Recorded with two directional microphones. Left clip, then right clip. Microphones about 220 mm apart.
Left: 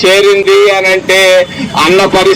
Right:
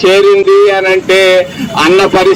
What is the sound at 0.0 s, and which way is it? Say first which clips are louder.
A man's voice: even; 25° left (ahead or behind).